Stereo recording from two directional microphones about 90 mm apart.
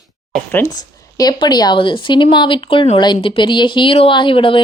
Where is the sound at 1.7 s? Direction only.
70° left (ahead or behind).